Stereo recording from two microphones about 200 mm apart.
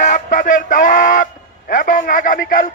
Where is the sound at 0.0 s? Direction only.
40° left (ahead or behind).